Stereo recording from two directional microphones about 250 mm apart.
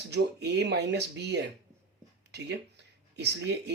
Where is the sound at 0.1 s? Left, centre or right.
Right.